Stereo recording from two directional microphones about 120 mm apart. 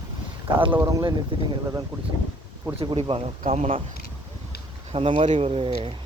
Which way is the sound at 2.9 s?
55° right (ahead or behind).